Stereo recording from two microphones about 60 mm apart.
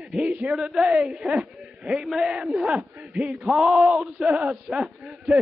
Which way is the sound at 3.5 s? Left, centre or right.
Centre.